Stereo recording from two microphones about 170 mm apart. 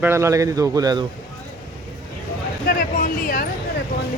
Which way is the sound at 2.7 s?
55° left (ahead or behind).